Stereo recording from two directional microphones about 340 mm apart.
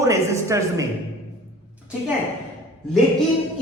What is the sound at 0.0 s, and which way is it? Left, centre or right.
Speech, centre.